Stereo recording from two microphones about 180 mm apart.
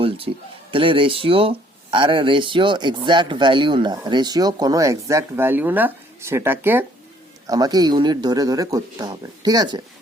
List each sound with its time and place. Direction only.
0.3 s speech: 35° right (ahead or behind)